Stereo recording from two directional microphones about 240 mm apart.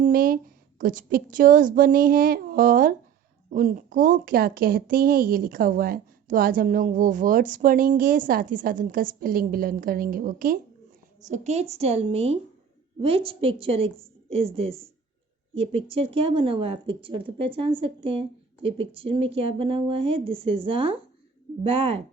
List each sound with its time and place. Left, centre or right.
0.0 s a woman's voice: right